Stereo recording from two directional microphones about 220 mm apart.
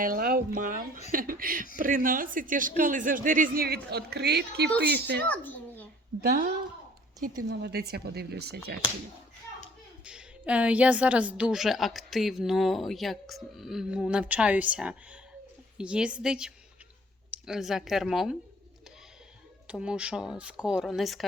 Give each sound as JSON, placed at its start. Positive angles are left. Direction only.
{"t": 0.0, "sound": "speech", "side_deg": -40}
{"t": 5.2, "sound": "a child's voice", "side_deg": 5}
{"t": 6.2, "sound": "speech", "side_deg": -40}
{"t": 7.4, "sound": "speech", "side_deg": -50}
{"t": 10.0, "sound": "a woman's voice", "side_deg": -5}
{"t": 19.8, "sound": "a woman's voice", "side_deg": -5}